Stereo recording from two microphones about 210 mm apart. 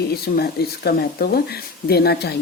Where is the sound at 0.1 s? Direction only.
50° left (ahead or behind).